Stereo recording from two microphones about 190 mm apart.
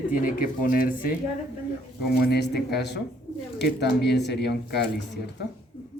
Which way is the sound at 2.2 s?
60° left (ahead or behind).